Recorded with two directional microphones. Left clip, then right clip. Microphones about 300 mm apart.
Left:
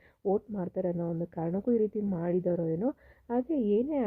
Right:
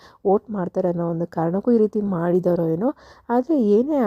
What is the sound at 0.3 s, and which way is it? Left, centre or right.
A woman's voice, centre.